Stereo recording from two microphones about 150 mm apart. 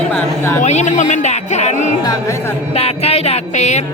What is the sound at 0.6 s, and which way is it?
Speech, 50° left (ahead or behind).